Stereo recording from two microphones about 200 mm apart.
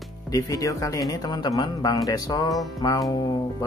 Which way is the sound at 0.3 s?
15° left (ahead or behind).